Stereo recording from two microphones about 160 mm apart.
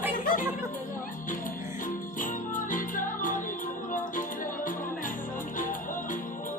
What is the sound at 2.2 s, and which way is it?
Music, 55° left (ahead or behind).